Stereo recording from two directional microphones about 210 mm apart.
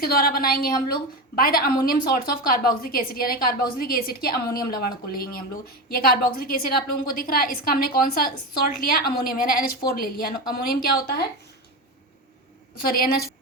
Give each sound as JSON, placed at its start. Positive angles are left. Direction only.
{"t": 0.0, "sound": "a woman's voice", "side_deg": 45}